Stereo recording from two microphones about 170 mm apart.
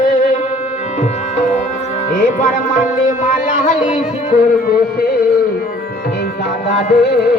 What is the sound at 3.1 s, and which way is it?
Music, 50° left (ahead or behind).